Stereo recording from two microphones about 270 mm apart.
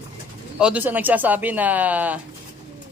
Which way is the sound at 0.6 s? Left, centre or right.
Centre.